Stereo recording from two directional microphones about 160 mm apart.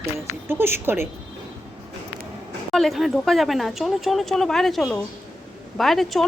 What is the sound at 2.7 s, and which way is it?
Speech, centre (ahead or behind).